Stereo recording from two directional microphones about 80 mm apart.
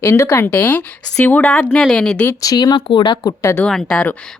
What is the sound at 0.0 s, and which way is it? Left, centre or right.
Speech, left.